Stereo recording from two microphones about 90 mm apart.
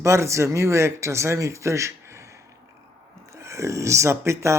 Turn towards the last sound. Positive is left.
turn(degrees=-30)  # may be behind; listen again after turning